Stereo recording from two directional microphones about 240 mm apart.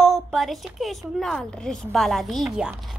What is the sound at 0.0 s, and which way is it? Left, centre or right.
A woman's voice, centre.